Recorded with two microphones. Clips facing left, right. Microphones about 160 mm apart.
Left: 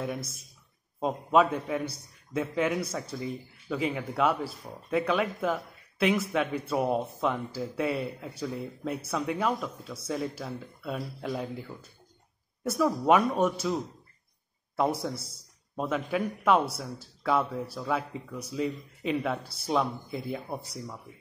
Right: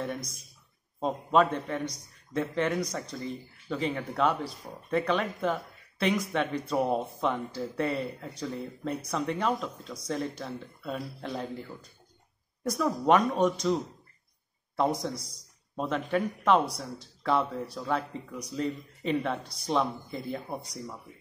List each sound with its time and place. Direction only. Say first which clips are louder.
0.9 s a man's voice: left 1 dB; 5° left (ahead or behind)
12.6 s a man's voice: left 1 dB; 5° left (ahead or behind)
15.7 s a man's voice: right 1 dB; 5° left (ahead or behind)